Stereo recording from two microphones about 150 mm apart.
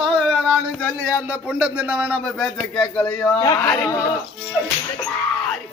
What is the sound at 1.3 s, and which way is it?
Speech, 10° right (ahead or behind).